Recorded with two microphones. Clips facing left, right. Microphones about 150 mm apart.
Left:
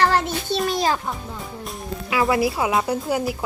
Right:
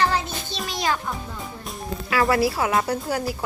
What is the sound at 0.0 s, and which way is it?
Music, 70° left (ahead or behind).